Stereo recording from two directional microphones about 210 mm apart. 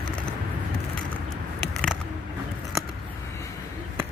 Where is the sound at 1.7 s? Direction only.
Centre (ahead or behind).